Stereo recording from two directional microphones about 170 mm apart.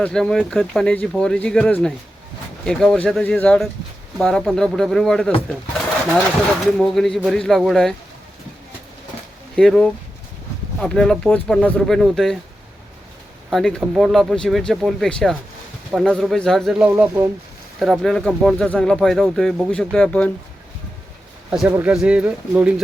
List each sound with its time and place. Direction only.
0.0 s speech: 5° left (ahead or behind)
6.7 s speech: centre (ahead or behind)
9.6 s speech: 5° left (ahead or behind)
13.5 s speech: centre (ahead or behind)
21.5 s speech: 5° right (ahead or behind)